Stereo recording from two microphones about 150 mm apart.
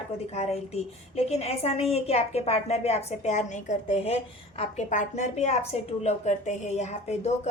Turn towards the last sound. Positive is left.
turn(degrees=50)  # may be behind; listen again after turning